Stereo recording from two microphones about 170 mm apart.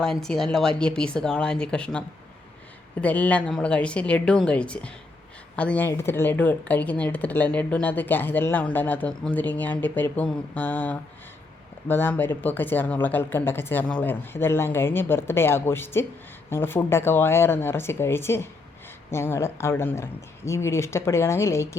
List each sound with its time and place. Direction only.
0.0 s speech: 5° left (ahead or behind)